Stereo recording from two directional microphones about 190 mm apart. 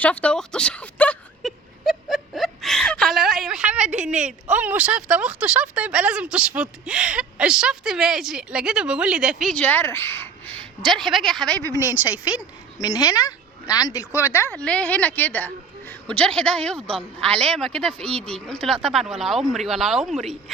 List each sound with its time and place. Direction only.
0.0 s whimper: 5° left (ahead or behind)
4.4 s speech: 10° right (ahead or behind)
11.7 s a woman's voice: 20° left (ahead or behind)
11.9 s a woman's voice: 10° right (ahead or behind)
12.8 s speech: 20° left (ahead or behind); by 20.3 s centre (ahead or behind)